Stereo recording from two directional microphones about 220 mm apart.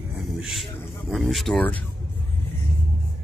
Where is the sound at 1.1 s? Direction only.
Centre (ahead or behind).